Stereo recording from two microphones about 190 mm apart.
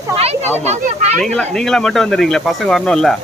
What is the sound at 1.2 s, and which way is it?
Speech, 5° left (ahead or behind).